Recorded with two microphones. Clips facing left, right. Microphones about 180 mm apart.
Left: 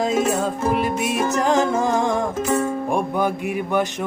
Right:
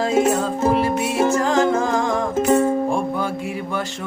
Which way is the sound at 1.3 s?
20° left (ahead or behind).